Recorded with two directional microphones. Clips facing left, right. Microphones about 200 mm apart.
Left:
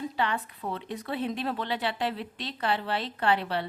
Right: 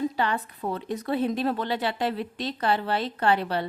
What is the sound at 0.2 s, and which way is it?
Speech, 40° right (ahead or behind).